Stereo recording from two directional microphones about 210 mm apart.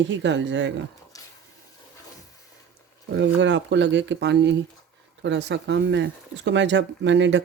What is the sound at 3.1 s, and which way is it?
Speech, 60° right (ahead or behind).